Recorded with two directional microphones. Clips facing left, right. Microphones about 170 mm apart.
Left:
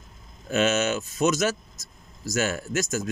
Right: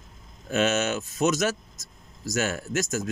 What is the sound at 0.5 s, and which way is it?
Speech, 55° right (ahead or behind).